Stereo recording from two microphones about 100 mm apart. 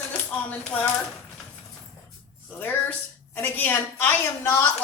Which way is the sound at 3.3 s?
20° left (ahead or behind).